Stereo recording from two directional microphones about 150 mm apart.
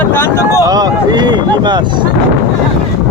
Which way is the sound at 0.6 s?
25° right (ahead or behind).